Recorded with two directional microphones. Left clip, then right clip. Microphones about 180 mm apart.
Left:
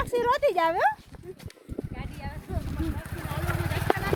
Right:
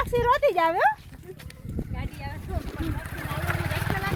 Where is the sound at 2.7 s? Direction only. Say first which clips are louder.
Even; 45° left (ahead or behind).